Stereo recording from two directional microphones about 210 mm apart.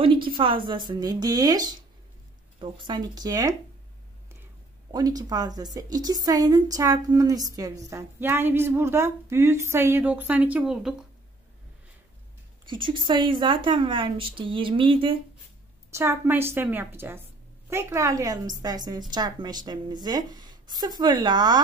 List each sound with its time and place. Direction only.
0.0 s a woman's voice: 25° right (ahead or behind)
4.9 s a woman's voice: 20° right (ahead or behind); by 11.0 s centre (ahead or behind)
12.6 s a woman's voice: 20° right (ahead or behind)
15.9 s a woman's voice: 10° right (ahead or behind)